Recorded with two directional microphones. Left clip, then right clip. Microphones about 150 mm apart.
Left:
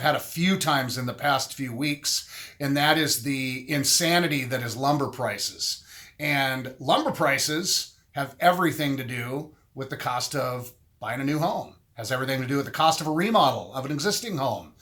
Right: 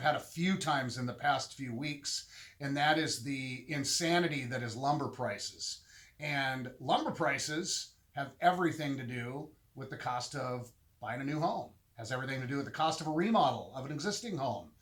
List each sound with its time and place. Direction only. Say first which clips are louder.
0.0 s speech: left 8 dB; 25° left (ahead or behind)